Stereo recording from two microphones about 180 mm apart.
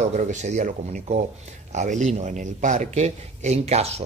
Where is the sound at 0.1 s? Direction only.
40° right (ahead or behind).